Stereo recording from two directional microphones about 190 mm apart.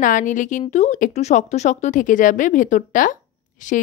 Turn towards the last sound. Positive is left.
turn(degrees=40)  # may be behind; listen again after turning